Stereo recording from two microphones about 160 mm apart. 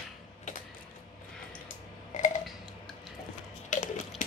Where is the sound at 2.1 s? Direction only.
50° left (ahead or behind).